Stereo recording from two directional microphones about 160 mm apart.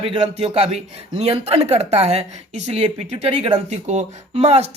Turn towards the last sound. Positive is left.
turn(degrees=-40)  # may be behind; listen again after turning